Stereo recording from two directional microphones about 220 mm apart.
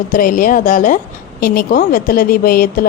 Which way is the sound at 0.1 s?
40° left (ahead or behind).